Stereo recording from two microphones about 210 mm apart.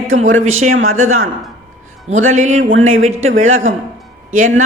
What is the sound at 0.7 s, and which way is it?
Speech, 75° right (ahead or behind).